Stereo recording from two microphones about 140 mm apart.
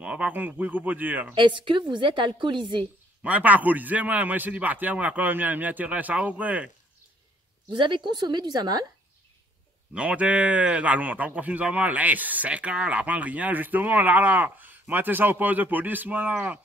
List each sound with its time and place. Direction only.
0.0 s a man's voice: 10° right (ahead or behind)
1.3 s a woman's voice: 35° right (ahead or behind)
3.2 s a man's voice: 10° right (ahead or behind)
7.7 s a woman's voice: 35° right (ahead or behind)
9.9 s a man's voice: 10° right (ahead or behind)